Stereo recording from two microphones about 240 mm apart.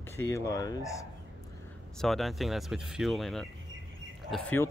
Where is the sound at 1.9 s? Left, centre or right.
Centre.